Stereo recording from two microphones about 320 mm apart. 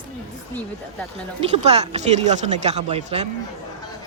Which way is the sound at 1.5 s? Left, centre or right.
Centre.